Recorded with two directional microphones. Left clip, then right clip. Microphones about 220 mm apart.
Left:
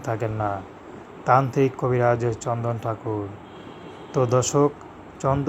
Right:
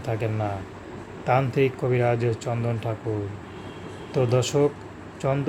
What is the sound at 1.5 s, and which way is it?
Speech, 10° left (ahead or behind).